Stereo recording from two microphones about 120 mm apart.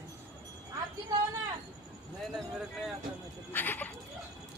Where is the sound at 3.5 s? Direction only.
15° left (ahead or behind).